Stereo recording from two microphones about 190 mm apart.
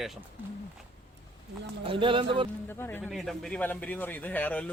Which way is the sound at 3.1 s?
Centre (ahead or behind).